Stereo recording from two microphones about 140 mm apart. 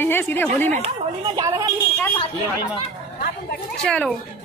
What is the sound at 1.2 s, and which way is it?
Speech, 30° right (ahead or behind).